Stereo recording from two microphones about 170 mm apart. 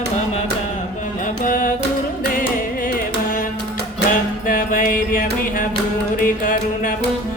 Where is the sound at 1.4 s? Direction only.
50° left (ahead or behind).